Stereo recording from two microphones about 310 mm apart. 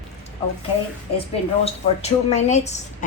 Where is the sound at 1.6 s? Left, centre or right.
Left.